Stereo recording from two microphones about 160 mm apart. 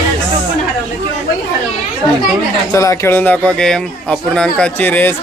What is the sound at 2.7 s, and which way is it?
Speech, 20° left (ahead or behind).